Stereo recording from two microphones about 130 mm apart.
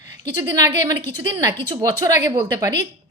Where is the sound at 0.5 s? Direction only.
25° right (ahead or behind).